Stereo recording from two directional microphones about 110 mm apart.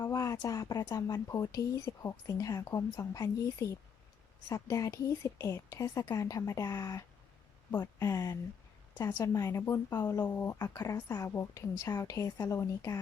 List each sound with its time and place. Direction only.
0.0 s a woman's voice: 30° left (ahead or behind)